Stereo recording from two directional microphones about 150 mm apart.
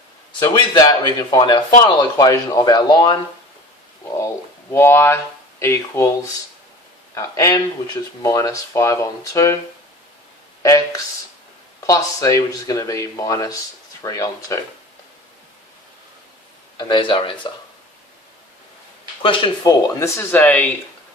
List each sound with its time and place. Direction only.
0.3 s speech: 30° left (ahead or behind)
4.7 s speech: 15° left (ahead or behind)
7.1 s speech: 20° left (ahead or behind)
10.6 s speech: 20° left (ahead or behind)
16.7 s speech: 30° left (ahead or behind)
19.6 s speech: 20° left (ahead or behind)